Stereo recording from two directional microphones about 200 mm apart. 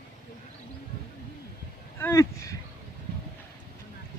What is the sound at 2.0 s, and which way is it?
Speech, 15° left (ahead or behind).